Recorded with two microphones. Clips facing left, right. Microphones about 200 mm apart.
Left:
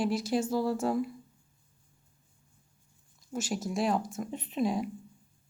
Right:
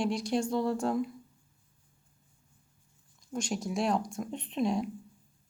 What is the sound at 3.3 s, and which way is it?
Speech, 5° left (ahead or behind).